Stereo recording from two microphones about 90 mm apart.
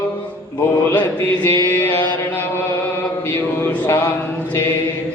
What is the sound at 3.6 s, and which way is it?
Mantra, 25° left (ahead or behind).